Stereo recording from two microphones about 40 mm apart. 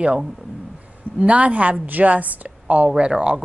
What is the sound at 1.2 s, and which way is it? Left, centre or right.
A woman's voice, right.